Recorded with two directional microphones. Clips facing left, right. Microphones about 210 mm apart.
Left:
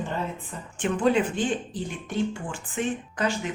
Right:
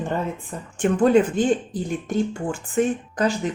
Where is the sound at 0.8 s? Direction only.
45° right (ahead or behind).